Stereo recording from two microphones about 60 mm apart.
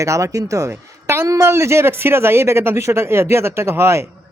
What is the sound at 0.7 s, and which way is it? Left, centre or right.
A man's voice, right.